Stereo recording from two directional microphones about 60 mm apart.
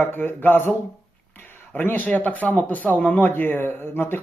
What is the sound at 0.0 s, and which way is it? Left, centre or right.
Speech, left.